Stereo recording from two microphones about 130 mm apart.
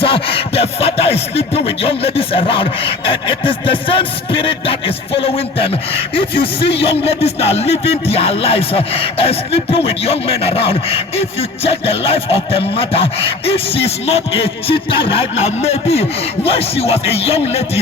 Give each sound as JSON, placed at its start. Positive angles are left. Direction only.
{"t": 0.0, "sound": "speech", "side_deg": 45}